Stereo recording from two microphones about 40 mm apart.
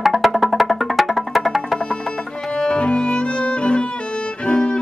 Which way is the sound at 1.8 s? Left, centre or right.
Left.